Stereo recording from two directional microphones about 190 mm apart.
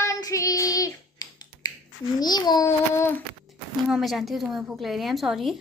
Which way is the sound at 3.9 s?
Centre (ahead or behind).